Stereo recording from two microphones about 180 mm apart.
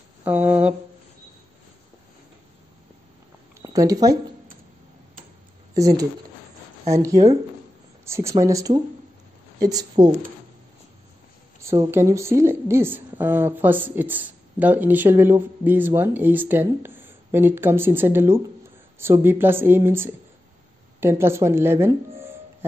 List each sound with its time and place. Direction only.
0.2 s a woman's voice: 10° right (ahead or behind)
3.6 s speech: 20° right (ahead or behind)
5.8 s a woman's voice: 20° right (ahead or behind)
11.6 s a woman's voice: 15° right (ahead or behind)